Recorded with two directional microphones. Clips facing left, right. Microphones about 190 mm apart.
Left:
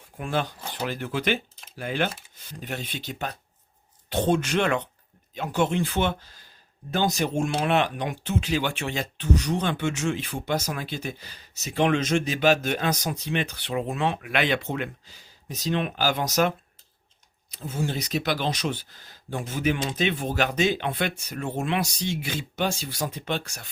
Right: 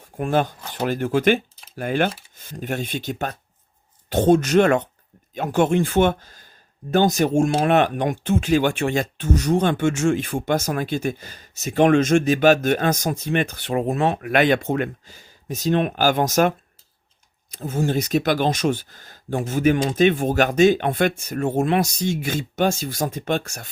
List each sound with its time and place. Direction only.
0.2 s speech: 45° right (ahead or behind)